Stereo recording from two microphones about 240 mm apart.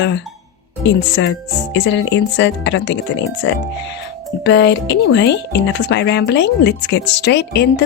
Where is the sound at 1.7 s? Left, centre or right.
Left.